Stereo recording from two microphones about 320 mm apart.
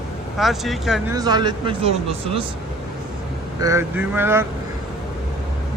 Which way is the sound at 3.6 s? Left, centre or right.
Centre.